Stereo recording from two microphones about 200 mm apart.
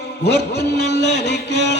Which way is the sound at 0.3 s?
55° left (ahead or behind).